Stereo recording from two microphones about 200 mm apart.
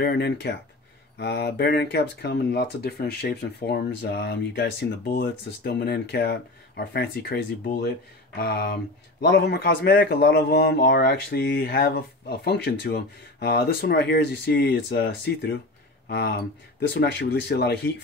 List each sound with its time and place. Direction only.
0.0 s speech: 55° left (ahead or behind)
5.0 s speech: 45° left (ahead or behind)